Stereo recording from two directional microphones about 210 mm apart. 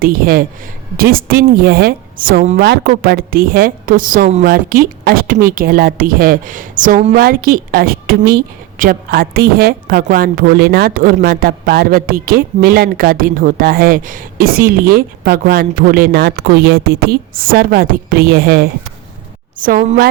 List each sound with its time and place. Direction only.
0.0 s a woman's voice: 45° right (ahead or behind)